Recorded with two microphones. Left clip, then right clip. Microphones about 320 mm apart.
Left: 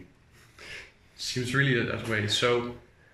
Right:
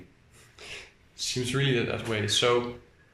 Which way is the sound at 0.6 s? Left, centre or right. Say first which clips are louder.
Right 1 dB; centre.